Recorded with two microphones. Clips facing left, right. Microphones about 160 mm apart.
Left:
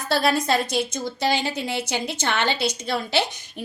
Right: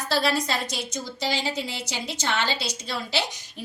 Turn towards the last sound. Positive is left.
turn(degrees=55)  # may be behind; listen again after turning